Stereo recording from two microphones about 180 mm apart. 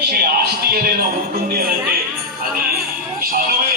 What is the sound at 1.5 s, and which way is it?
Music, 55° right (ahead or behind).